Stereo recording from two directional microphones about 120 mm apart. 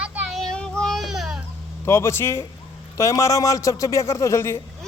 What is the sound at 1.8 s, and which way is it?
Speech, 25° left (ahead or behind).